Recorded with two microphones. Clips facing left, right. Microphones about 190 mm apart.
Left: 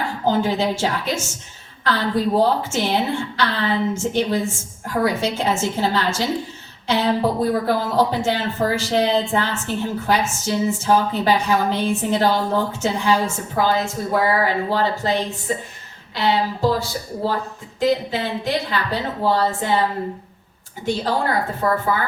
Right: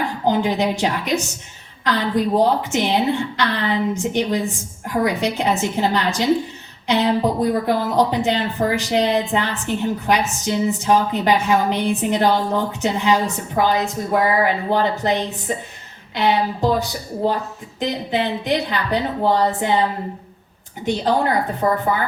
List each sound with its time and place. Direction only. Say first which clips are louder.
0.3 s speech: right 1 dB; 15° right (ahead or behind)
21.6 s speech: right 1 dB; 20° right (ahead or behind)